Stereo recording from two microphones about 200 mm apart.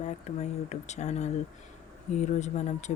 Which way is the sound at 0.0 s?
35° left (ahead or behind).